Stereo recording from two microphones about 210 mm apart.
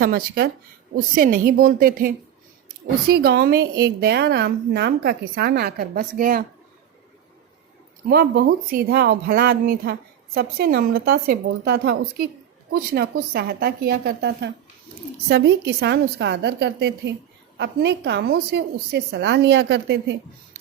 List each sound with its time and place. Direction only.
0.0 s a woman's voice: 45° right (ahead or behind)
8.1 s a woman's voice: 45° right (ahead or behind)